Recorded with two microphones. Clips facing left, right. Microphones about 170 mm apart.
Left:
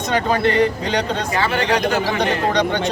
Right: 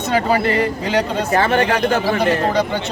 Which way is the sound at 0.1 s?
5° right (ahead or behind).